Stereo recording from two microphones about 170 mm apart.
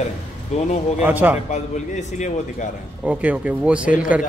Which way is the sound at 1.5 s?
45° left (ahead or behind).